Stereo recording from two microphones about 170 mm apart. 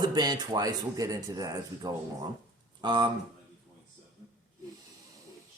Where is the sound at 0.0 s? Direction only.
25° right (ahead or behind).